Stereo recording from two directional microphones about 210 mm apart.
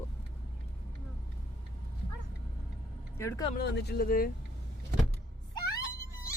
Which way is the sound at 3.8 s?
45° left (ahead or behind).